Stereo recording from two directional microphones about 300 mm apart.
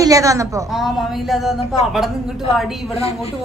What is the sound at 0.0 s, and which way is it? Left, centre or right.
A woman's voice, centre.